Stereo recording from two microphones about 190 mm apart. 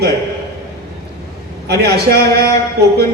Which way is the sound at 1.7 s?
60° right (ahead or behind).